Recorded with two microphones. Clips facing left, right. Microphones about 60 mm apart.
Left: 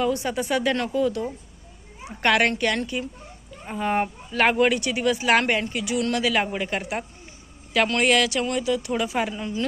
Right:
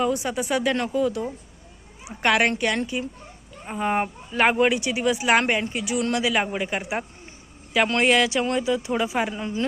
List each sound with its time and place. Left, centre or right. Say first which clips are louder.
0.0 s speech: even; centre
7.7 s a woman's voice: right 1 dB; centre